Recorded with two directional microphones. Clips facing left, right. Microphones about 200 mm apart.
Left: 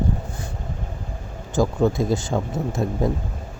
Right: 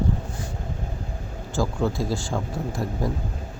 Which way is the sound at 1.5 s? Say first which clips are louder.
Left 5 dB; 20° left (ahead or behind).